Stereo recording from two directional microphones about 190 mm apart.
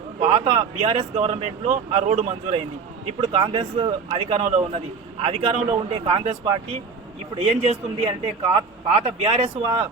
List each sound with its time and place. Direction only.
0.2 s a man's voice: 30° right (ahead or behind)